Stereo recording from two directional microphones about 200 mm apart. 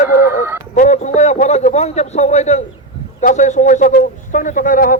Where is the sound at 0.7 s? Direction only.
35° left (ahead or behind).